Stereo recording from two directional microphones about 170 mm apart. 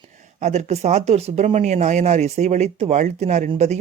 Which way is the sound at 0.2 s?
40° right (ahead or behind).